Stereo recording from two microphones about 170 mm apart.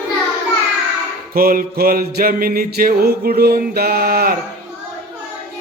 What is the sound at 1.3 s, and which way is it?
Mantra, 60° right (ahead or behind).